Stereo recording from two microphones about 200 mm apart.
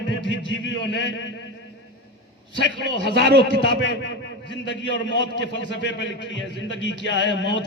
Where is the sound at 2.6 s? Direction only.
55° left (ahead or behind).